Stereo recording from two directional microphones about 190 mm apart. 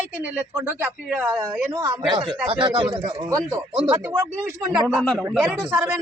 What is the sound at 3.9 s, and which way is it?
A man's voice, 10° right (ahead or behind).